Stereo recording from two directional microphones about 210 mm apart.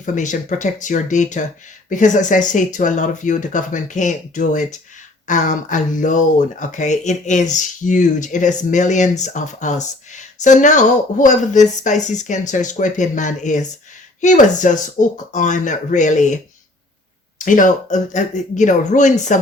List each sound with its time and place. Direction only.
0.0 s speech: 35° left (ahead or behind)